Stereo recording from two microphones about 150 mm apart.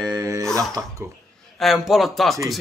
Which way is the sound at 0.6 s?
20° right (ahead or behind).